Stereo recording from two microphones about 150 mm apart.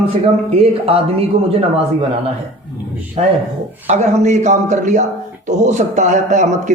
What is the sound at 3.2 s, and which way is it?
A man's voice, 40° right (ahead or behind).